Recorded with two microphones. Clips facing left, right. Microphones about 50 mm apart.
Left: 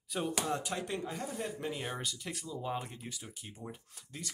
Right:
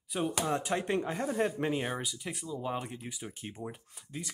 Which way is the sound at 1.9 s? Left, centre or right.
Centre.